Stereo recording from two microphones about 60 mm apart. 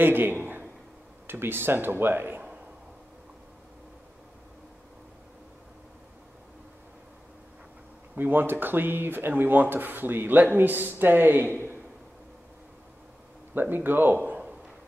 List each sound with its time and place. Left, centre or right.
0.0 s speech: right
8.2 s speech: right
13.6 s speech: right